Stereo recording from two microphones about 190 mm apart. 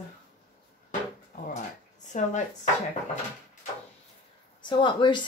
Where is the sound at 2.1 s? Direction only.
40° left (ahead or behind).